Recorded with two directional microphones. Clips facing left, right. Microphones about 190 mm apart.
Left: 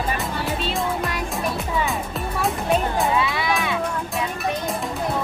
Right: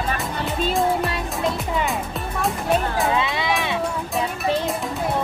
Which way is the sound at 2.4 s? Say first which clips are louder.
Even; centre (ahead or behind).